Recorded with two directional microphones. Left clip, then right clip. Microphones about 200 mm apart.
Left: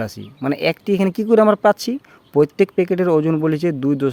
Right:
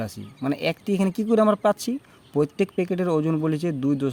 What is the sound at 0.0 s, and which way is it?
Speech, 25° left (ahead or behind).